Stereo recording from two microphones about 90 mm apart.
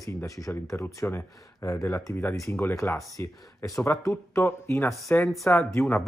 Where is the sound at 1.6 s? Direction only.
35° left (ahead or behind).